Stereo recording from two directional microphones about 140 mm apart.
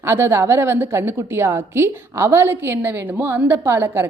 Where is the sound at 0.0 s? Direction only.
15° right (ahead or behind).